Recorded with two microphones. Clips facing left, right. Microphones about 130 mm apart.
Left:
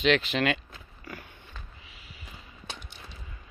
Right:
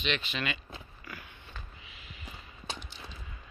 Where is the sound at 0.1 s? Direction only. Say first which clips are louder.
Left 7 dB; 85° left.